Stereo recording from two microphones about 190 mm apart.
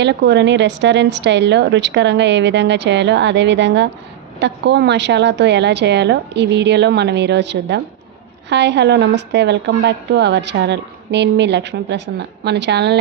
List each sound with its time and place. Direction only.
0.0 s a woman's voice: 65° right (ahead or behind)